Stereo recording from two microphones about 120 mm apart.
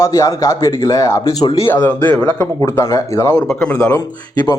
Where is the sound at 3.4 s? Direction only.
10° left (ahead or behind).